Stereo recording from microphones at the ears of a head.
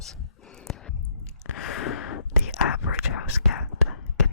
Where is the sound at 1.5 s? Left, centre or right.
Left.